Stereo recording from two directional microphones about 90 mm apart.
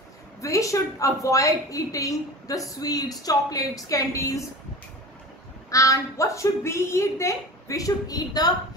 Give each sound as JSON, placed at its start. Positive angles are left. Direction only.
{"t": 0.4, "sound": "a woman's voice", "side_deg": 35}
{"t": 5.7, "sound": "a woman's voice", "side_deg": 35}